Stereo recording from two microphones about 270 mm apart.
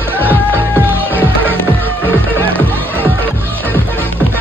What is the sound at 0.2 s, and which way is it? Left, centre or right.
Music, centre.